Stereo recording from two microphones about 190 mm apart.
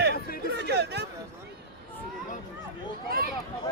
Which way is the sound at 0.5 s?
60° right (ahead or behind).